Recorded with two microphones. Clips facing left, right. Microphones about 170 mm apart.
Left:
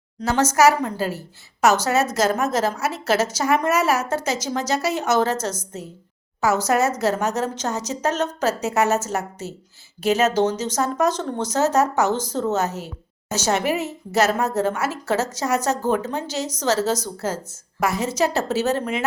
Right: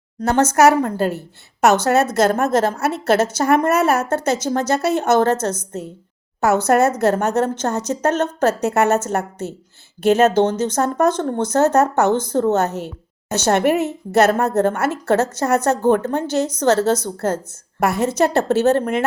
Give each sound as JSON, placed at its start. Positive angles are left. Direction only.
{"t": 0.2, "sound": "a woman's voice", "side_deg": -55}